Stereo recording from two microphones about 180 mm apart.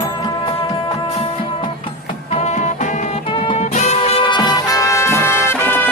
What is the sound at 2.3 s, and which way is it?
Music, 40° left (ahead or behind).